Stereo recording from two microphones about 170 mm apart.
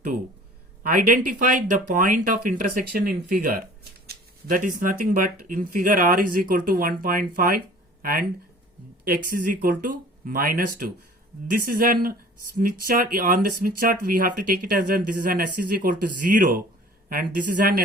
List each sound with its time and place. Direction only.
0.8 s speech: 55° right (ahead or behind)